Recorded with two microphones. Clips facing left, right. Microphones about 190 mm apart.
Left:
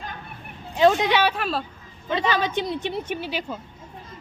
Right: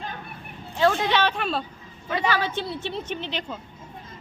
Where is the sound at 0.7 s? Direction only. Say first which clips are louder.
Left 3 dB; 15° left (ahead or behind); by 1.6 s centre (ahead or behind).